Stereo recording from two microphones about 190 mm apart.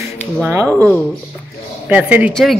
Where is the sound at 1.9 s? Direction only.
10° right (ahead or behind).